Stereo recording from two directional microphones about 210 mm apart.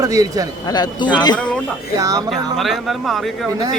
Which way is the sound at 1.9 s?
15° right (ahead or behind).